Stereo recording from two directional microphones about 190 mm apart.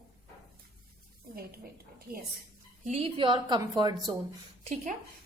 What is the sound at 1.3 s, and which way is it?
Speech, 55° right (ahead or behind).